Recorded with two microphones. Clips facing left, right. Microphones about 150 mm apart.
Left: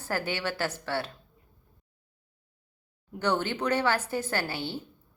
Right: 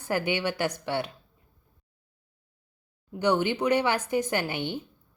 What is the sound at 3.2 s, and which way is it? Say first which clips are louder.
A woman's voice: right 4 dB; 15° right (ahead or behind).